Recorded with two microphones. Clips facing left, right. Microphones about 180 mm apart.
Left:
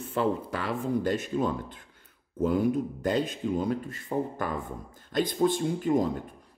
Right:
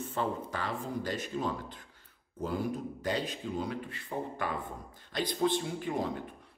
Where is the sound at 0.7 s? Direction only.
50° left (ahead or behind).